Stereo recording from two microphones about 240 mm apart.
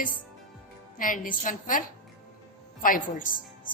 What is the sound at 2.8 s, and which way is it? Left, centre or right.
Speech, left.